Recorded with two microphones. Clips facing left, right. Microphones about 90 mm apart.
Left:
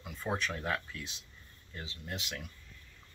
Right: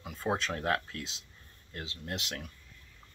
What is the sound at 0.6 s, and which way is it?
Speech, 80° right.